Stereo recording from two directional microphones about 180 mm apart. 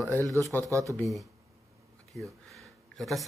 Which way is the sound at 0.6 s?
15° right (ahead or behind).